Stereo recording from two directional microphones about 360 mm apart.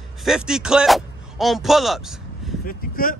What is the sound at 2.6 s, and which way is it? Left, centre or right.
Speech, left.